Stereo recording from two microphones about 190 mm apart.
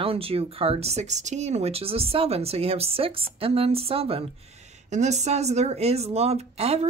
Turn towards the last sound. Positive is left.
turn(degrees=-35)  # may be behind; listen again after turning